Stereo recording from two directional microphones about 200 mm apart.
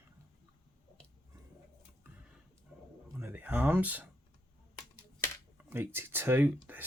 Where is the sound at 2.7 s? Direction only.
Centre (ahead or behind).